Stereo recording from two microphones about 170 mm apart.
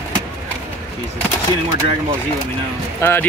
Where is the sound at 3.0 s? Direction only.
10° left (ahead or behind).